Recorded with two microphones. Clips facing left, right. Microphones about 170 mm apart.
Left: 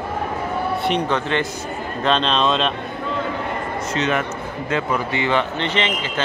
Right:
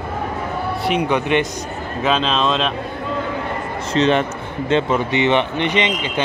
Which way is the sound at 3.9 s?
30° right (ahead or behind).